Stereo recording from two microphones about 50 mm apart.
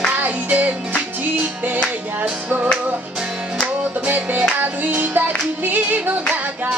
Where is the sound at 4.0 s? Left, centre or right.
Right.